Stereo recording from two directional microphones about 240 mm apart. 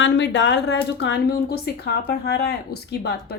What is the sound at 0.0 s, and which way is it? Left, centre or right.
A woman's voice, left.